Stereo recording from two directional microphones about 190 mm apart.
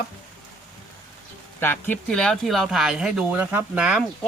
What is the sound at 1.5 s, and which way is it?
Speech, 10° left (ahead or behind).